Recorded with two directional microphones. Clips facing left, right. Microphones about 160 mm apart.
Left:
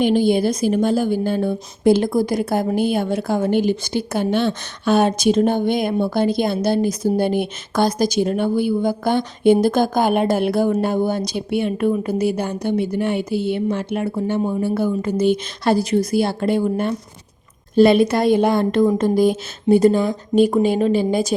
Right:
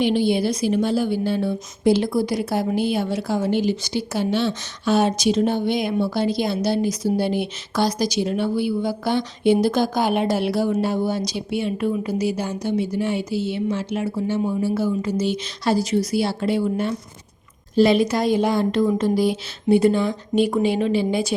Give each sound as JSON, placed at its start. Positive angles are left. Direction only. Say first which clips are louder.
{"t": 0.0, "sound": "a woman's voice", "louder": "left 3 dB", "side_deg": 45}